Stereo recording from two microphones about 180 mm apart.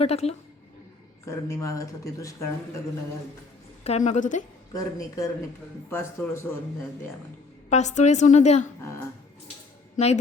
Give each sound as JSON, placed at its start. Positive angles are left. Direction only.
{"t": 0.0, "sound": "a woman's voice", "side_deg": 35}
{"t": 1.2, "sound": "speech", "side_deg": 15}
{"t": 3.8, "sound": "a woman's voice", "side_deg": 40}
{"t": 4.7, "sound": "speech", "side_deg": 20}
{"t": 7.7, "sound": "a woman's voice", "side_deg": 40}